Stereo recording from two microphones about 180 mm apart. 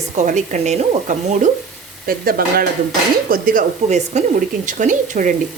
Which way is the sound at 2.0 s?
55° right (ahead or behind).